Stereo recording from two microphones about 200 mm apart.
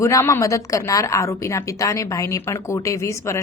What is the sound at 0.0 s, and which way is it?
A woman's voice, 15° left (ahead or behind).